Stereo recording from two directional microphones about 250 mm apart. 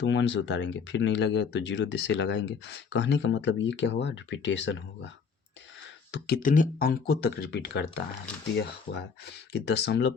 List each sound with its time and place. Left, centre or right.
0.0 s speech: left
9.5 s speech: left